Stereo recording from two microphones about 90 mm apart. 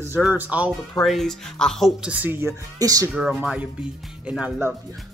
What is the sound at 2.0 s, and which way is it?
Speech, 15° right (ahead or behind).